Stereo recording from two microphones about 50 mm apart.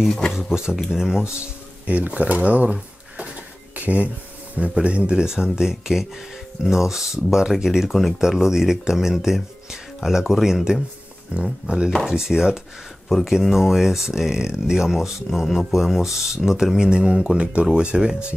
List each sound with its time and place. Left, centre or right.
0.3 s speech: centre
1.9 s speech: right
3.3 s a sound: right
4.6 s speech: right